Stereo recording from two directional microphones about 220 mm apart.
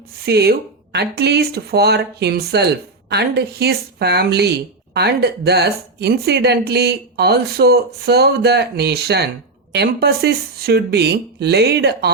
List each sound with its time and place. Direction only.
0.3 s speech: 45° right (ahead or behind)